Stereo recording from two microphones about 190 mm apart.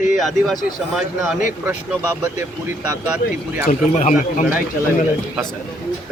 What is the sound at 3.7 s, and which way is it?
Speech, 35° left (ahead or behind).